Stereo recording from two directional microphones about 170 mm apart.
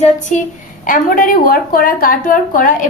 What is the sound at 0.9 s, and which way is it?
A woman's voice, 55° left (ahead or behind).